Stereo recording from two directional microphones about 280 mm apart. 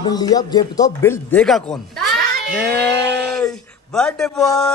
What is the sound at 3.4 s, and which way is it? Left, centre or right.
Speech, centre.